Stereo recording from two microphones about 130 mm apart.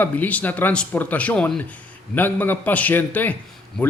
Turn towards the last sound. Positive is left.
turn(degrees=10)  # may be behind; listen again after turning